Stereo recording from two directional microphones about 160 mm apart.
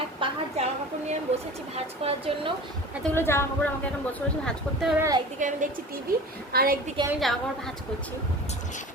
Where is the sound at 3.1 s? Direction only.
15° left (ahead or behind).